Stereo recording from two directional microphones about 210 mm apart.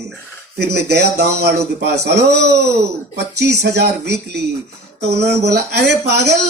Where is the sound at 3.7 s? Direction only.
50° right (ahead or behind).